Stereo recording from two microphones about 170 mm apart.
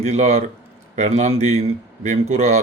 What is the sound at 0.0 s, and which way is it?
Speech, 40° right (ahead or behind).